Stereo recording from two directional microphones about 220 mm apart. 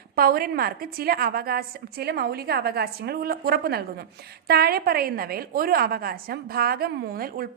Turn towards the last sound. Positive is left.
turn(degrees=-40)  # may be behind; listen again after turning